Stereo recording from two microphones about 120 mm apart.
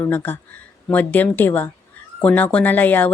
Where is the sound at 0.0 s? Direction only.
20° left (ahead or behind).